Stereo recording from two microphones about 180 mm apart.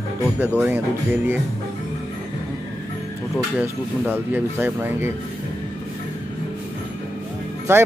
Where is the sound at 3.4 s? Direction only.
5° right (ahead or behind).